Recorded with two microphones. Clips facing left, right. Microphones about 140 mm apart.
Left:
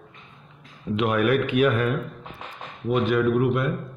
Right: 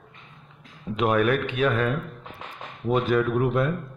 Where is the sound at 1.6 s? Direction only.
15° left (ahead or behind).